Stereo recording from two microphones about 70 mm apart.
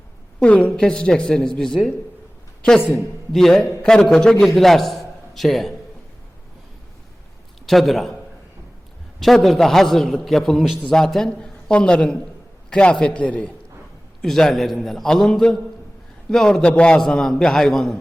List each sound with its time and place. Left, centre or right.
0.4 s speech: centre
3.3 s a man's voice: centre
7.7 s a man's voice: centre
9.2 s a man's voice: centre
14.2 s a man's voice: centre